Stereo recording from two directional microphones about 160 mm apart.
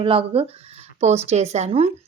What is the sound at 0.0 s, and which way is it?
Speech, 35° right (ahead or behind).